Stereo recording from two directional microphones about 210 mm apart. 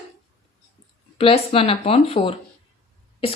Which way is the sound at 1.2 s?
25° left (ahead or behind).